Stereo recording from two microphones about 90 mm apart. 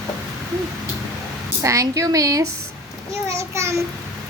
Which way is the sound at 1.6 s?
35° right (ahead or behind).